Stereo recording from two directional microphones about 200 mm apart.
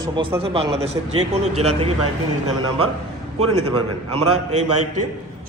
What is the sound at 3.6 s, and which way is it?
Speech, 90° right.